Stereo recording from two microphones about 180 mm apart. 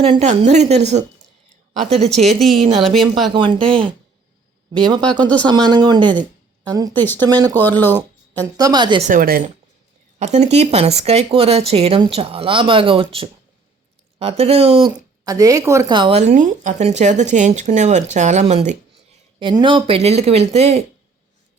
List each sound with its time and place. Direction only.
0.0 s a woman's voice: 35° right (ahead or behind)
2.8 s speech: centre (ahead or behind)
3.3 s speech: 25° right (ahead or behind)
4.9 s speech: 25° right (ahead or behind)
6.9 s speech: 10° left (ahead or behind)
7.2 s speech: 20° right (ahead or behind)
7.5 s speech: 10° left (ahead or behind)
8.4 s speech: 20° right (ahead or behind)
9.0 s speech: 45° right (ahead or behind)
10.2 s a woman's voice: 40° right (ahead or behind)
15.2 s a woman's voice: 20° right (ahead or behind); by 18.8 s 40° right (ahead or behind)
19.4 s a woman's voice: 25° right (ahead or behind)